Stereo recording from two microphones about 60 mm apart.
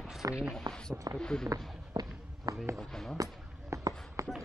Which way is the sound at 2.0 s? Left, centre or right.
Right.